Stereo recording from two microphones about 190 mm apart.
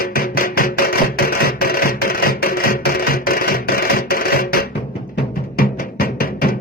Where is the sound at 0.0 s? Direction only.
50° left (ahead or behind).